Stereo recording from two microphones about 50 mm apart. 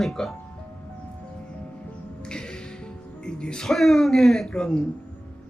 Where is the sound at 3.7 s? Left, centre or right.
Centre.